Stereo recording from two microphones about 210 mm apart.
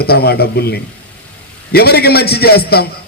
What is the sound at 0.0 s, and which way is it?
A man's voice, 50° left (ahead or behind).